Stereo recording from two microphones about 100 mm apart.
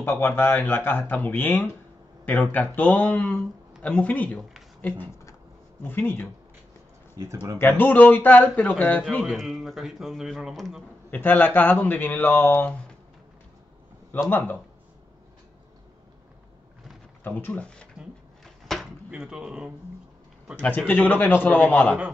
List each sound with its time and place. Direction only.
0.0 s a man's voice: 20° left (ahead or behind)
7.5 s a man's voice: 20° left (ahead or behind)
9.1 s a man's voice: centre (ahead or behind)
11.1 s a man's voice: 15° left (ahead or behind)
14.3 s speech: 20° left (ahead or behind)
17.2 s a man's voice: 15° left (ahead or behind)
18.4 s a sound: centre (ahead or behind)
19.0 s speech: 10° right (ahead or behind)
20.6 s a man's voice: 15° left (ahead or behind)